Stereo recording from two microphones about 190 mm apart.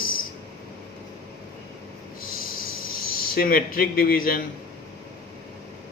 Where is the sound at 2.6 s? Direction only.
50° left (ahead or behind).